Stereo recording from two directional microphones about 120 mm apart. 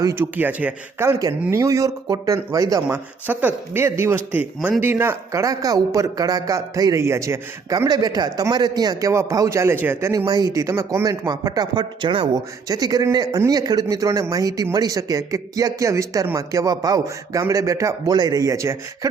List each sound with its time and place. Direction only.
0.2 s speech: 15° right (ahead or behind)
2.9 s speech: 15° right (ahead or behind)